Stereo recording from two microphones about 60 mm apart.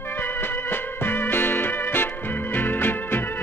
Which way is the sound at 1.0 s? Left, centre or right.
Left.